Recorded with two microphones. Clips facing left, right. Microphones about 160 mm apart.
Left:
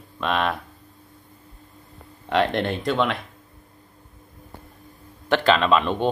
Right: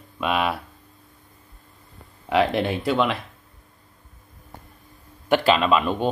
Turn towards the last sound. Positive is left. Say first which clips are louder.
# even
turn(degrees=-5)  # may be behind; listen again after turning